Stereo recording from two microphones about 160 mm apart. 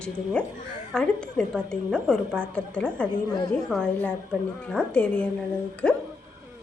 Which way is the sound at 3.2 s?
25° left (ahead or behind).